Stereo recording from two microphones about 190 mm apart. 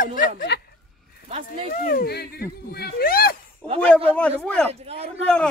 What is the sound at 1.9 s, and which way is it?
Speech, 55° left (ahead or behind).